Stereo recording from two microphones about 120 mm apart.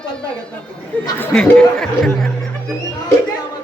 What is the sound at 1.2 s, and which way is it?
Speech, 15° left (ahead or behind).